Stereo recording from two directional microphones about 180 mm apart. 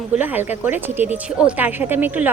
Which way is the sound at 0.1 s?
10° right (ahead or behind).